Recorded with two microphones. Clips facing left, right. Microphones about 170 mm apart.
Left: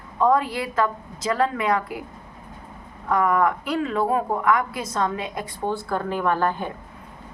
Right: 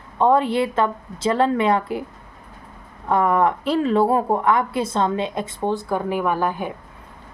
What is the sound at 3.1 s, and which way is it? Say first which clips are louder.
A woman's voice: right 2 dB; 30° right (ahead or behind).